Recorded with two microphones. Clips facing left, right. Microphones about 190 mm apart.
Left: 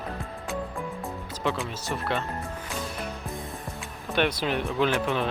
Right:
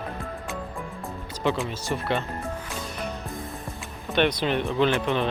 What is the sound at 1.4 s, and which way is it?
Speech, centre (ahead or behind).